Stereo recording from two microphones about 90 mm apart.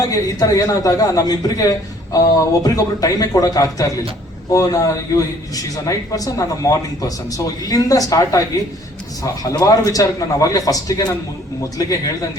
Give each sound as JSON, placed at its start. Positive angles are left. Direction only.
{"t": 0.0, "sound": "a man's voice", "side_deg": 40}